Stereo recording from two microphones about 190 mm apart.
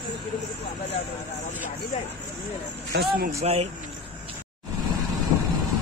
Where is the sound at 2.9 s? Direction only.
55° right (ahead or behind).